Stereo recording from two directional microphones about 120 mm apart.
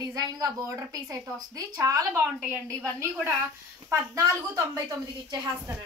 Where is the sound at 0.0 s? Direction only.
30° right (ahead or behind).